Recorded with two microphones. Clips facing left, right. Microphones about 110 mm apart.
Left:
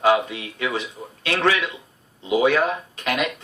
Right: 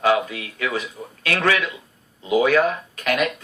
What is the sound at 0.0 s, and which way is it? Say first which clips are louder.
Speech: left 1 dB; 25° left (ahead or behind).